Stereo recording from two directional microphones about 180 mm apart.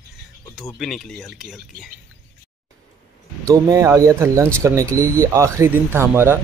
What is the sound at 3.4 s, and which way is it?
Speech, 20° right (ahead or behind).